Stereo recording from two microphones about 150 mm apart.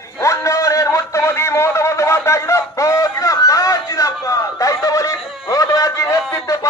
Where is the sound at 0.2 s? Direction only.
20° left (ahead or behind).